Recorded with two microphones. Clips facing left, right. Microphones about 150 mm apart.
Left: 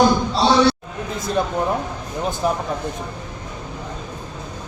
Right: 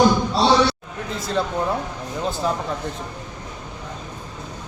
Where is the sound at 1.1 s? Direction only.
15° left (ahead or behind).